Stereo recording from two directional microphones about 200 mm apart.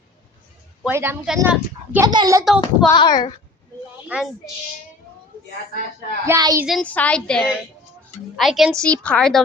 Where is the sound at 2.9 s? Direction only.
20° left (ahead or behind).